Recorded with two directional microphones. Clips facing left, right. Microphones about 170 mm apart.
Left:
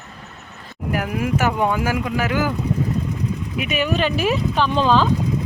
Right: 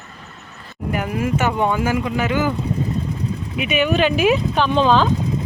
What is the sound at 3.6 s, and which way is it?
Speech, 40° left (ahead or behind).